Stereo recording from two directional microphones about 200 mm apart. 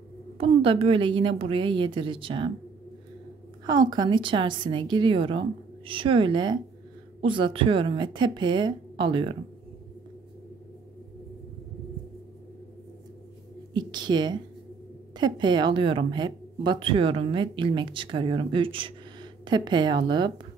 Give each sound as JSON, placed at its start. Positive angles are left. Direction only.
{"t": 0.4, "sound": "speech", "side_deg": -30}
{"t": 3.6, "sound": "speech", "side_deg": -20}
{"t": 13.7, "sound": "speech", "side_deg": -20}